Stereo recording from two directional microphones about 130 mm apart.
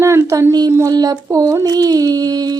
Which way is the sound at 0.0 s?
20° right (ahead or behind).